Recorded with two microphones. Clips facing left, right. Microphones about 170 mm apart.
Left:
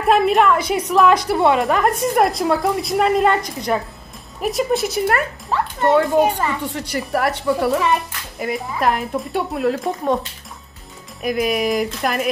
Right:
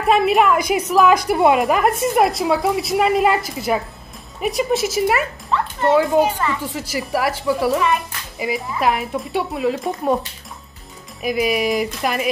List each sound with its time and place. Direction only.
0.0 s a woman's voice: centre (ahead or behind)
11.2 s a woman's voice: centre (ahead or behind)